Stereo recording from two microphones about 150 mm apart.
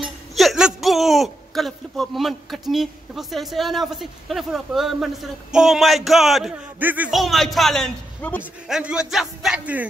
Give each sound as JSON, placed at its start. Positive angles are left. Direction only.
{"t": 0.4, "sound": "speech", "side_deg": 0}
{"t": 6.8, "sound": "a man's voice", "side_deg": -10}
{"t": 7.1, "sound": "speech", "side_deg": 0}
{"t": 8.4, "sound": "speech", "side_deg": -5}